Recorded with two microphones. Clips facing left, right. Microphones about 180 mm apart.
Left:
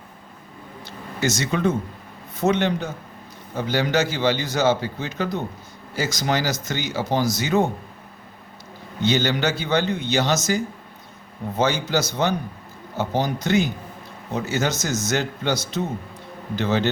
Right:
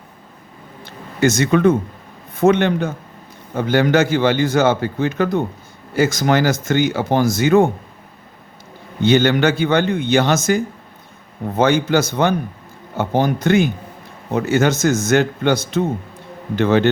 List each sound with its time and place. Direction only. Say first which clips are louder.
0.9 s a sound: right 8 dB; 55° right (ahead or behind)
2.3 s a man's voice: right 6 dB; 55° right (ahead or behind)
9.0 s a man's voice: right 7 dB; 55° right (ahead or behind)